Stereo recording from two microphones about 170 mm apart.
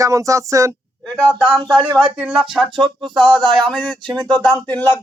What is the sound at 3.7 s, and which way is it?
Speech, 5° left (ahead or behind).